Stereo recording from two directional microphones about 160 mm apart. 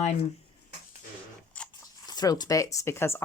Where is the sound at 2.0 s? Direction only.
25° left (ahead or behind).